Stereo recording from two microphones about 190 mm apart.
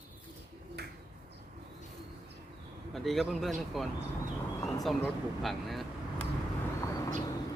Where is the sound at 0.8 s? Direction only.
60° right (ahead or behind).